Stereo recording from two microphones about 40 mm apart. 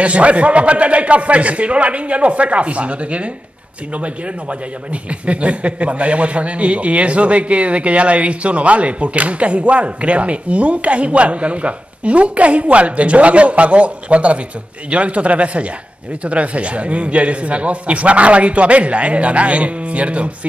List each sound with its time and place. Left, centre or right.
0.0 s a man's voice: right
5.2 s a man's voice: right